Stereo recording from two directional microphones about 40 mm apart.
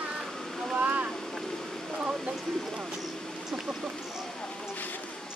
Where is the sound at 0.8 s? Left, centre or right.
Right.